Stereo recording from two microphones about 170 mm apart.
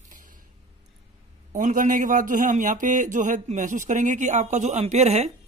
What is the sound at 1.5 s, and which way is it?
Speech, 50° right (ahead or behind).